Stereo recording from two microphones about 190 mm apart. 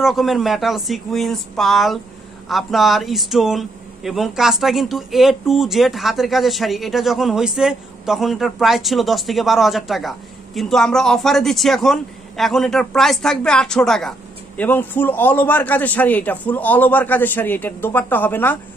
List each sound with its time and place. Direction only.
0.0 s a man's voice: centre (ahead or behind)